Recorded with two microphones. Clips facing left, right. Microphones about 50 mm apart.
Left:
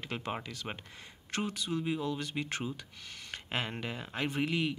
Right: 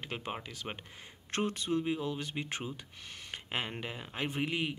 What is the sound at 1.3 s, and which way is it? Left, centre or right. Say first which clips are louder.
Speech: right 2 dB; right.